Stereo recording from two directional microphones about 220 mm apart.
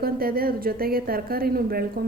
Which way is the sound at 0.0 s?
40° right (ahead or behind).